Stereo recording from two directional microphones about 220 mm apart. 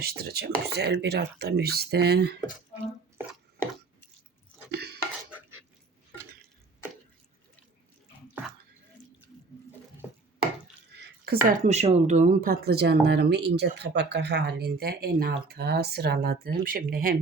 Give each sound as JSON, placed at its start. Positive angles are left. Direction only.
{"t": 0.0, "sound": "speech", "side_deg": -45}
{"t": 4.7, "sound": "dishes", "side_deg": -50}
{"t": 10.9, "sound": "a sound", "side_deg": -50}
{"t": 11.4, "sound": "speech", "side_deg": -35}